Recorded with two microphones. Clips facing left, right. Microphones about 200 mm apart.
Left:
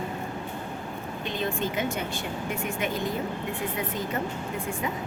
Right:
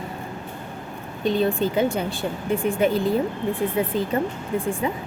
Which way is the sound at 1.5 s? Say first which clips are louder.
Right 7 dB; 35° right (ahead or behind).